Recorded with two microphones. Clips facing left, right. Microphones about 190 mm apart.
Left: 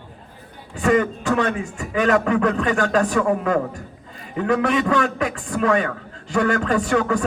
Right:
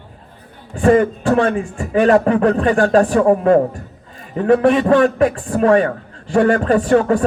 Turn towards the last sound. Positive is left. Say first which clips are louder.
# right 6 dB
turn(degrees=-40)  # may be behind; listen again after turning